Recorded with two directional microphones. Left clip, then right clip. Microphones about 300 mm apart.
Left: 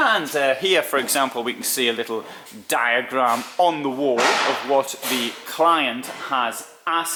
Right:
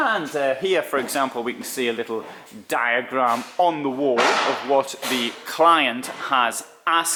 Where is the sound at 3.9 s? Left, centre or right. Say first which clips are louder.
Even; right.